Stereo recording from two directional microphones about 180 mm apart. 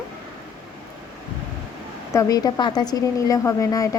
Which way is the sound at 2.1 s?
20° left (ahead or behind).